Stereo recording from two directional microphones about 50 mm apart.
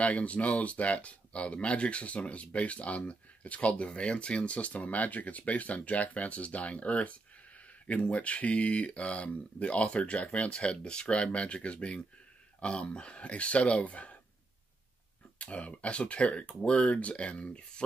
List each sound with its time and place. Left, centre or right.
0.0 s speech: left
15.3 s speech: left